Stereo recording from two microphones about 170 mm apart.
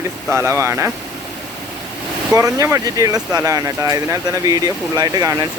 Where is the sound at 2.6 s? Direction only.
20° right (ahead or behind).